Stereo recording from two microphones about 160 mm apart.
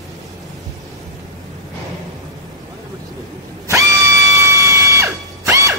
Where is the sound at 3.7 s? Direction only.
20° right (ahead or behind).